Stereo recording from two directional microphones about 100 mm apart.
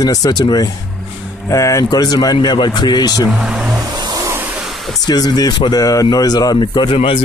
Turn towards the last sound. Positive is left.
turn(degrees=50)  # may be behind; listen again after turning